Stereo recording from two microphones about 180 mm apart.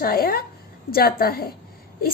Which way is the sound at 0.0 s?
55° left (ahead or behind).